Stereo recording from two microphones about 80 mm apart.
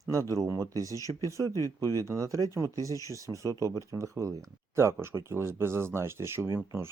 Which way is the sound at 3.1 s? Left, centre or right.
Right.